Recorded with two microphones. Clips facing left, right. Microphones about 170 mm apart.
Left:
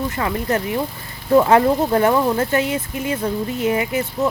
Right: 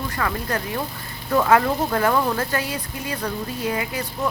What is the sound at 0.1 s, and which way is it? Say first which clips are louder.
Speech: left 4 dB; 20° left (ahead or behind).